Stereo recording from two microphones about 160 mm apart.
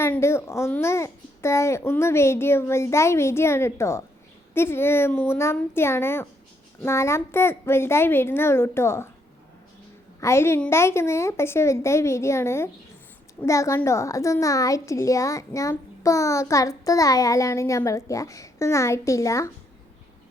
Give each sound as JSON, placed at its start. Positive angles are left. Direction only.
{"t": 0.0, "sound": "a child's voice", "side_deg": 15}
{"t": 10.2, "sound": "a child's voice", "side_deg": 15}